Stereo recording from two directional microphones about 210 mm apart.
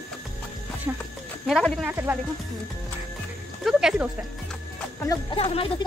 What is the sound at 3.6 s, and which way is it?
Speech, centre (ahead or behind).